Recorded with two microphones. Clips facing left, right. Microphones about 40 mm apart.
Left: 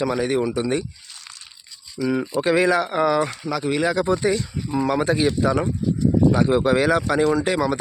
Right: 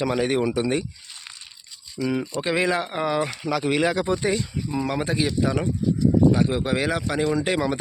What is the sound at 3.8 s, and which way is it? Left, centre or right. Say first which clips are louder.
Speech: left 2 dB; centre.